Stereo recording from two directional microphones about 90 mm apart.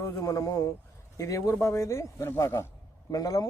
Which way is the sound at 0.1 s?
40° left (ahead or behind).